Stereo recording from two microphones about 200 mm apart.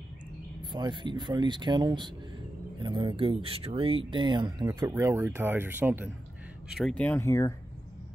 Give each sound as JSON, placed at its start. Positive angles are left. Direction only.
{"t": 0.6, "sound": "speech", "side_deg": -20}
{"t": 6.8, "sound": "speech", "side_deg": 5}